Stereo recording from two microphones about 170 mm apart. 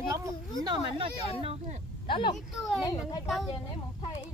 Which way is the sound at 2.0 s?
30° left (ahead or behind).